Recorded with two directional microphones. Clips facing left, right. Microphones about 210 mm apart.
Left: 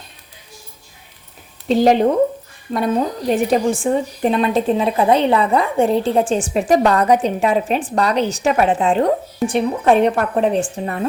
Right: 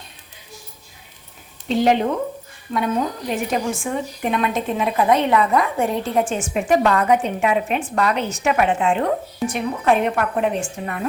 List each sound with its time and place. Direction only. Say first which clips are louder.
1.6 s speech: left 4 dB; 40° left (ahead or behind)